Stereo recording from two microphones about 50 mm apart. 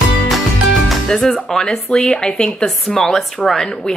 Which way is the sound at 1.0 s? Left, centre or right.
Centre.